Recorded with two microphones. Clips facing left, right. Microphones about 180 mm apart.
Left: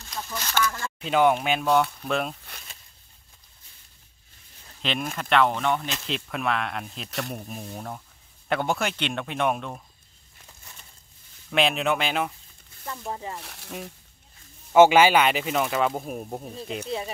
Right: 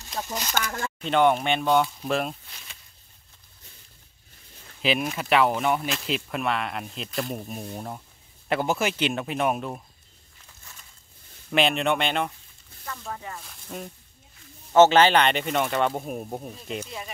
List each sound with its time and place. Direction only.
0.5 s speech: 45° right (ahead or behind)
1.0 s speech: 5° left (ahead or behind)
4.8 s speech: 5° right (ahead or behind)
11.5 s speech: centre (ahead or behind)
12.8 s speech: 25° left (ahead or behind)
13.4 s speech: 70° left (ahead or behind)
14.7 s speech: 10° left (ahead or behind)